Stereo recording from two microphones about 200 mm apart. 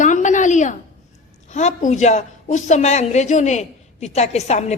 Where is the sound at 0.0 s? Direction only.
40° left (ahead or behind).